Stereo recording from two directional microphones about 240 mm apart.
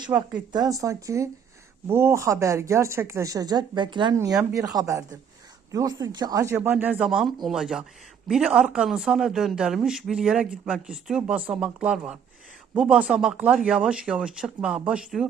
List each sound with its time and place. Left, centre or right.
0.1 s a woman's voice: centre